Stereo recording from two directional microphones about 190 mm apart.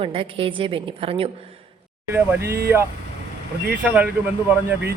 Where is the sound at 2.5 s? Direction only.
55° right (ahead or behind).